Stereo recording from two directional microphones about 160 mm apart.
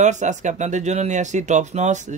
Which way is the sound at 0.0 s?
50° right (ahead or behind).